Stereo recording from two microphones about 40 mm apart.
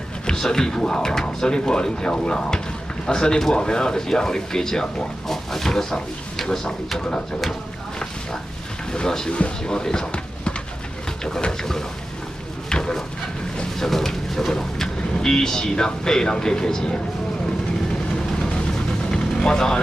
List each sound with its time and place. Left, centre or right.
0.3 s speech: centre
6.3 s drawer open or close: centre
7.0 s speech: left
8.9 s speech: centre
12.6 s a sound: centre
13.7 s speech: centre
19.0 s vehicle: centre